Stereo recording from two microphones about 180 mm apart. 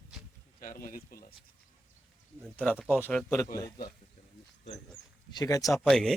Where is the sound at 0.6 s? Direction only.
50° left (ahead or behind).